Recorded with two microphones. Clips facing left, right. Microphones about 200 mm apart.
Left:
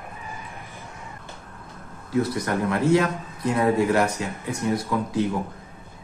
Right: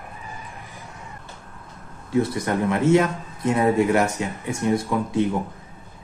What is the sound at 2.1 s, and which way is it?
Speech, 25° right (ahead or behind).